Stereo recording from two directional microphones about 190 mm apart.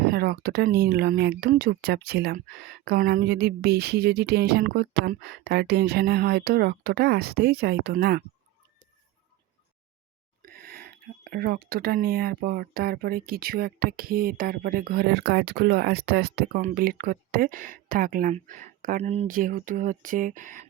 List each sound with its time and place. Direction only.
0.0 s speech: 55° right (ahead or behind)
10.4 s speech: 50° right (ahead or behind)
16.6 s speech: 45° right (ahead or behind)
19.4 s speech: 45° right (ahead or behind)